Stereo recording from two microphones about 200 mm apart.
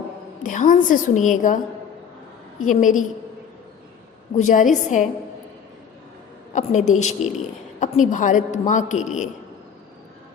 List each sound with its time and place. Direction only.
0.4 s a man's voice: 40° left (ahead or behind)
2.6 s a man's voice: 40° left (ahead or behind)
4.4 s a man's voice: 40° left (ahead or behind)
6.5 s a woman's voice: 40° left (ahead or behind)